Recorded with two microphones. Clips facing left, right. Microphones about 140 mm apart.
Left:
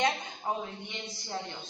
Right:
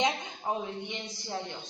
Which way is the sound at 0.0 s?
15° right (ahead or behind).